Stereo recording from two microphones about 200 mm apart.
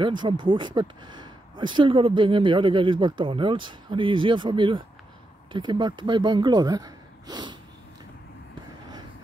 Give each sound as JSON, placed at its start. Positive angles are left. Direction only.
{"t": 0.0, "sound": "speech", "side_deg": -25}